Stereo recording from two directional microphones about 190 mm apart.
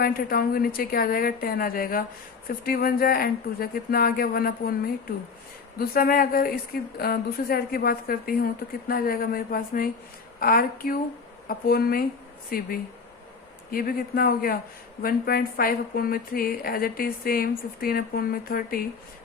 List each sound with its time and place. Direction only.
0.0 s a woman's voice: 50° left (ahead or behind)